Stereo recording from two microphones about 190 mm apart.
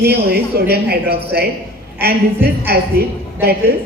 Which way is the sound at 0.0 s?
55° right (ahead or behind).